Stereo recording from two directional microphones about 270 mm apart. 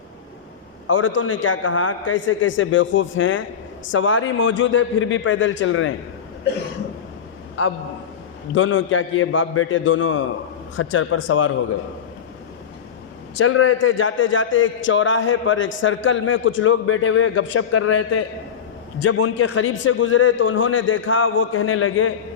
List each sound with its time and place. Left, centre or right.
0.9 s a man's voice: left
8.5 s a man's voice: left
13.4 s a man's voice: left